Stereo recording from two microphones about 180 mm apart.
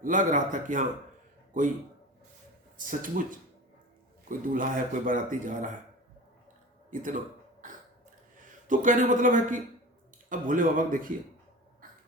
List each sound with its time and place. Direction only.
0.0 s speech: 45° right (ahead or behind)
2.7 s speech: 50° right (ahead or behind)
6.9 s speech: 45° right (ahead or behind)
8.6 s speech: 45° right (ahead or behind)